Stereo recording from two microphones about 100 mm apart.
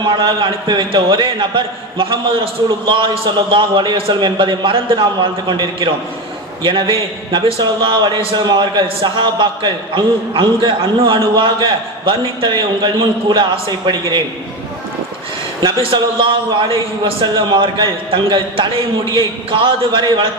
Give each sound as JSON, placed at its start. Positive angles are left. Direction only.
{"t": 0.0, "sound": "a man's voice", "side_deg": -50}
{"t": 8.4, "sound": "a man's voice", "side_deg": -45}
{"t": 9.0, "sound": "a man's voice", "side_deg": -55}
{"t": 15.6, "sound": "a man's voice", "side_deg": -60}